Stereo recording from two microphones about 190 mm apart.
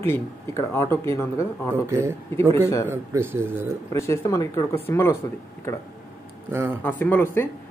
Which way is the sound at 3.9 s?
15° left (ahead or behind).